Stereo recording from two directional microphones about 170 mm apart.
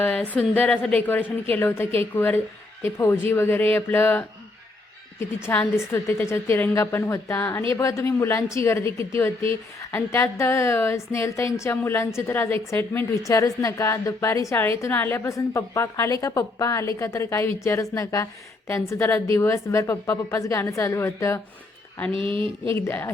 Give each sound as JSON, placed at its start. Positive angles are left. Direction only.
{"t": 0.0, "sound": "a woman's voice", "side_deg": 10}
{"t": 5.5, "sound": "a woman's voice", "side_deg": 15}
{"t": 22.1, "sound": "a sound", "side_deg": -30}
{"t": 22.7, "sound": "a woman's voice", "side_deg": 15}